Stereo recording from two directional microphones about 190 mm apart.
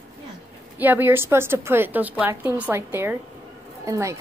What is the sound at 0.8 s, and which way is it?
A woman's voice, 10° right (ahead or behind).